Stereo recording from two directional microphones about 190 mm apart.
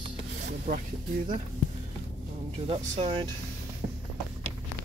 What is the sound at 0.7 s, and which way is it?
Speech, 45° right (ahead or behind).